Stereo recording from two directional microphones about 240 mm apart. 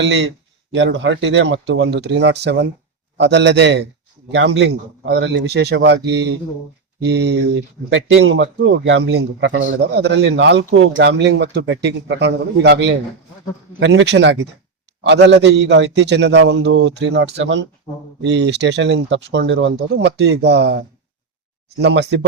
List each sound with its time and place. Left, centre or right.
0.0 s a man's voice: right